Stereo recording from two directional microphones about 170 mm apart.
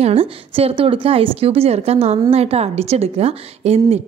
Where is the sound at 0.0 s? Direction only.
35° right (ahead or behind).